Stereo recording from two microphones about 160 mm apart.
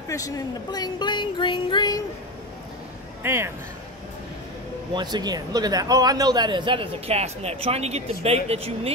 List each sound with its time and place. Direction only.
0.1 s speech: 25° left (ahead or behind)
3.3 s speech: 15° right (ahead or behind)
4.9 s a man's voice: 25° right (ahead or behind)